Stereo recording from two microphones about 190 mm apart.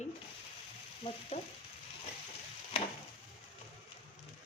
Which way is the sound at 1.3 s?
35° left (ahead or behind).